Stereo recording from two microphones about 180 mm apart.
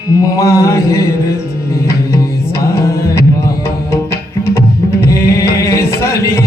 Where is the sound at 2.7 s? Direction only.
15° left (ahead or behind).